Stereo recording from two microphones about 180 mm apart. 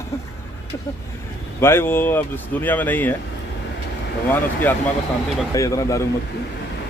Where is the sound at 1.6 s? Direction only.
15° left (ahead or behind).